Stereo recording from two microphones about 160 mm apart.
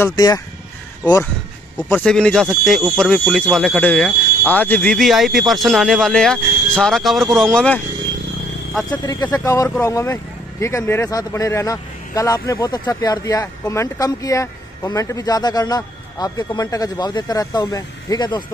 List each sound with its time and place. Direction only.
0.0 s speech: 25° left (ahead or behind)
1.8 s speech: 5° left (ahead or behind)
9.0 s speech: 25° left (ahead or behind)